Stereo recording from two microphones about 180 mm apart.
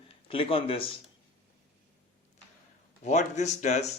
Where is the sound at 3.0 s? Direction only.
40° left (ahead or behind).